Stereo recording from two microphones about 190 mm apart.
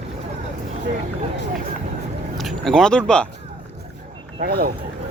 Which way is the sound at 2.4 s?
Centre (ahead or behind).